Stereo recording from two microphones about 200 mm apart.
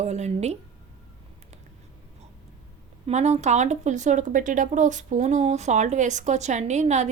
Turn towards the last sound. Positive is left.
turn(degrees=-35)  # may be behind; listen again after turning